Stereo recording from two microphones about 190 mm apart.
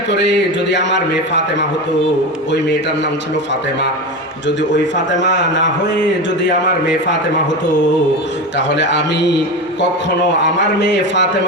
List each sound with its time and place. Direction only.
0.1 s a man's voice: 65° left (ahead or behind)
5.2 s a man's voice: 70° left (ahead or behind)
8.5 s a man's voice: 70° left (ahead or behind)
10.4 s a man's voice: 70° left (ahead or behind)